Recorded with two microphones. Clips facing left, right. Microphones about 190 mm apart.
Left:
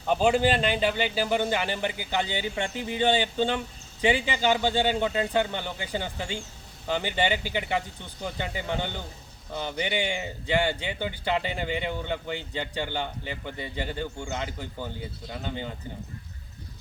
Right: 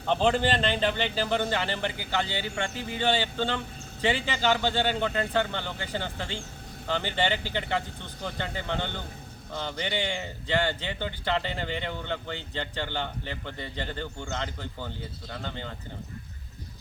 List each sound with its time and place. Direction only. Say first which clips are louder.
0.0 s speech: left 2 dB; 10° left (ahead or behind)